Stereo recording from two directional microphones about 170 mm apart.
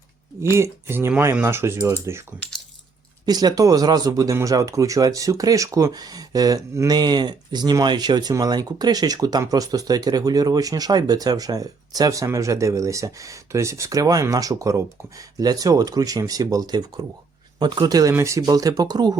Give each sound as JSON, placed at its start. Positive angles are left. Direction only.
{"t": 0.5, "sound": "speech", "side_deg": -15}
{"t": 3.2, "sound": "speech", "side_deg": -25}